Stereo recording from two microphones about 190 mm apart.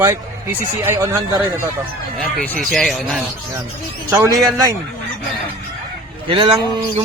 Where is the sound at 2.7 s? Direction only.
Centre (ahead or behind).